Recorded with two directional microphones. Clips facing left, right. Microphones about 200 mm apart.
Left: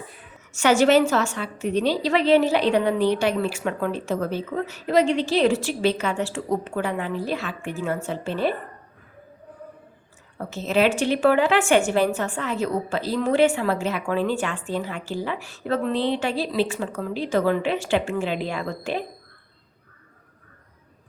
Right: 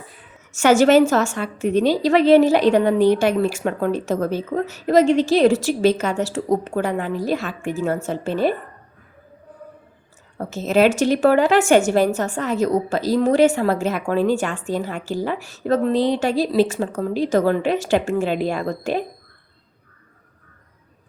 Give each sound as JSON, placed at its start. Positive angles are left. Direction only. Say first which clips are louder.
{"t": 0.5, "sound": "a woman's voice", "louder": "right 4 dB", "side_deg": -45}
{"t": 10.3, "sound": "a woman's voice", "louder": "right 4 dB", "side_deg": -45}